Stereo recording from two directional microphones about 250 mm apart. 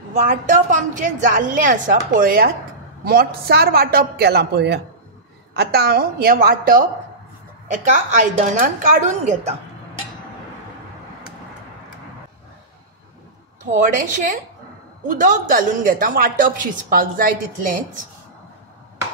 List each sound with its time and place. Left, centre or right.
0.2 s a woman's voice: right
13.8 s a woman's voice: right